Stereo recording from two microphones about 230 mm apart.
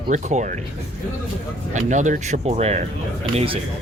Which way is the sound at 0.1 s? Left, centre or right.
Right.